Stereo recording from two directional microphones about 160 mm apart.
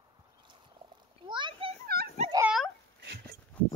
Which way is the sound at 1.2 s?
30° right (ahead or behind).